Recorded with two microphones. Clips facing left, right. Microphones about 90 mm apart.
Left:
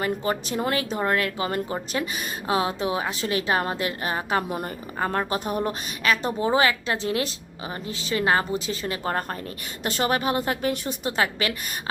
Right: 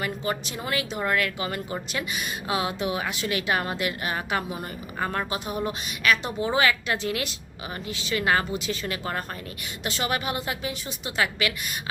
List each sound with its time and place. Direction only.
0.0 s speech: 35° left (ahead or behind)
4.4 s a woman's voice: 50° left (ahead or behind)
4.9 s speech: 35° left (ahead or behind)
5.3 s a woman's voice: 45° left (ahead or behind)
6.0 s speech: 35° left (ahead or behind)
10.7 s a woman's voice: 55° left (ahead or behind)
11.2 s speech: 35° left (ahead or behind)